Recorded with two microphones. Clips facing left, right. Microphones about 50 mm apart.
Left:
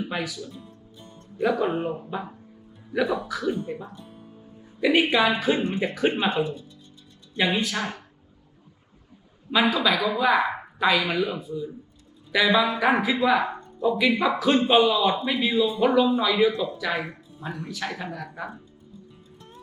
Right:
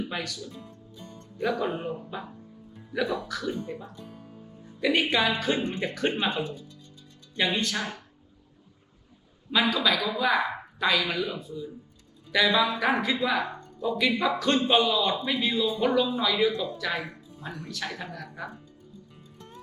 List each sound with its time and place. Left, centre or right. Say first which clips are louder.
0.0 s a woman's voice: left 3 dB; centre
3.5 s speech: left 4 dB; left
4.8 s a woman's voice: left 4 dB; centre
9.5 s a woman's voice: left 3 dB; centre
13.8 s a woman's voice: left 4 dB; centre
15.4 s a woman's voice: left 5 dB; centre